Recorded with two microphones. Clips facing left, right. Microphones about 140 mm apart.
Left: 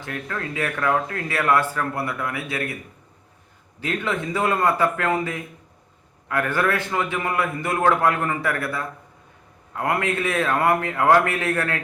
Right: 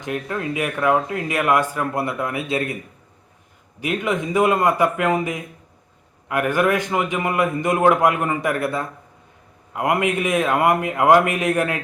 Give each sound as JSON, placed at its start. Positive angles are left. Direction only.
{"t": 0.0, "sound": "speech", "side_deg": -20}
{"t": 3.8, "sound": "speech", "side_deg": -15}